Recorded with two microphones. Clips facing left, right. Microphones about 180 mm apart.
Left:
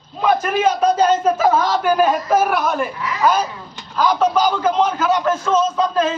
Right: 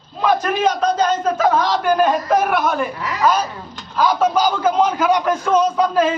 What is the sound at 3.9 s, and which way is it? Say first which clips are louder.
A man's voice: even; 10° right (ahead or behind).